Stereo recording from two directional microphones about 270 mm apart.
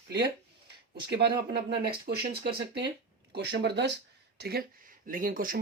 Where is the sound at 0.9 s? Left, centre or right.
Right.